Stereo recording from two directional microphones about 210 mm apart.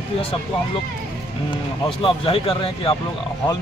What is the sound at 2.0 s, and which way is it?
Mantra, 25° left (ahead or behind).